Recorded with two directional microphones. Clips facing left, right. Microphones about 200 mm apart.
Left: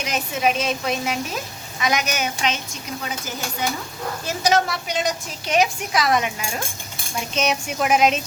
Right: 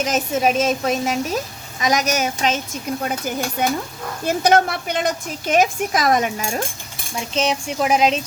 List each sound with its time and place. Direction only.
0.0 s a woman's voice: 45° right (ahead or behind)
3.0 s a woman's voice: 55° right (ahead or behind)
7.3 s speech: 30° right (ahead or behind)